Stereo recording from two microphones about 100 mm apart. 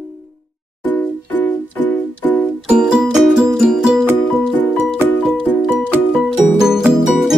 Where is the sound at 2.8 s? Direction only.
5° right (ahead or behind).